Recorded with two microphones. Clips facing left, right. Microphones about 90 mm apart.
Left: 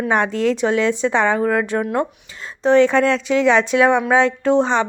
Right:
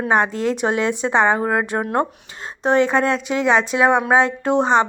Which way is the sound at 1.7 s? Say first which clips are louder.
Left 2 dB; 25° right (ahead or behind).